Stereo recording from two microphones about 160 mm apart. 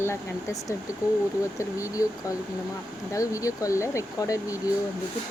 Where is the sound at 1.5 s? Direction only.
20° left (ahead or behind).